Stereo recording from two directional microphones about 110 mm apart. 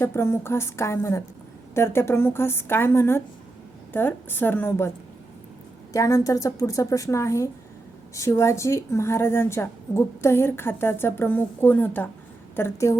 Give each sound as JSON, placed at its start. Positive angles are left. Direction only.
{"t": 0.0, "sound": "a woman's voice", "side_deg": 20}
{"t": 5.9, "sound": "a woman's voice", "side_deg": 30}